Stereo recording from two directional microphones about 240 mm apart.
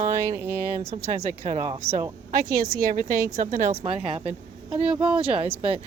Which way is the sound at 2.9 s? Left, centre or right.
Right.